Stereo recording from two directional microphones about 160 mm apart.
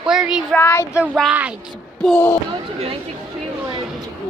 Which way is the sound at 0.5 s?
15° left (ahead or behind).